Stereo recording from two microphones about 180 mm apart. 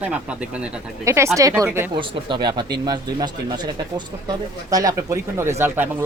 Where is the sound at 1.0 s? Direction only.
15° right (ahead or behind).